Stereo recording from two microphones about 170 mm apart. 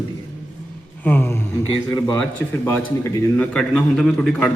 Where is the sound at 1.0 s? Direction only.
10° left (ahead or behind).